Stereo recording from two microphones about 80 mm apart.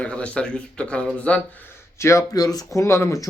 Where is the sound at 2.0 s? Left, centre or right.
Left.